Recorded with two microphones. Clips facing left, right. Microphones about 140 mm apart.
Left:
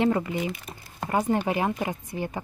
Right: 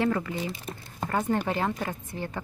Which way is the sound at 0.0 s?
20° left (ahead or behind).